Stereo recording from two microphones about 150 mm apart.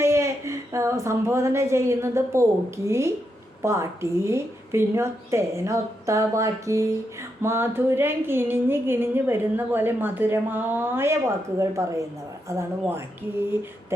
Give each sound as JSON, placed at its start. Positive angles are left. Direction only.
{"t": 0.0, "sound": "a woman's voice", "side_deg": -20}